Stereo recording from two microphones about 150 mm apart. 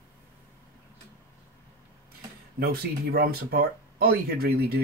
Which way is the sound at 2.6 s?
90° right.